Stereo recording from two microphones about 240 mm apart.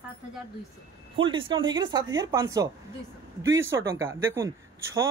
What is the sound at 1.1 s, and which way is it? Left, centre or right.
Speech, right.